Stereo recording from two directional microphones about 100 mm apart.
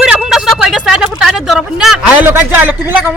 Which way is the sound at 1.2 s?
Centre (ahead or behind).